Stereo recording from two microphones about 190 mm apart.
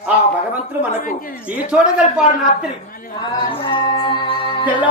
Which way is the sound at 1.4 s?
5° right (ahead or behind).